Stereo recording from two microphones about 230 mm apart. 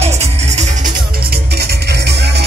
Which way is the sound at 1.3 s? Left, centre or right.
Right.